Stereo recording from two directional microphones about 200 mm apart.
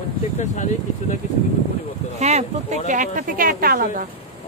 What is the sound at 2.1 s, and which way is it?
Speech, 35° right (ahead or behind).